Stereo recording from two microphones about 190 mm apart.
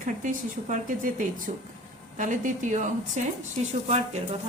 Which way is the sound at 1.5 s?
40° right (ahead or behind).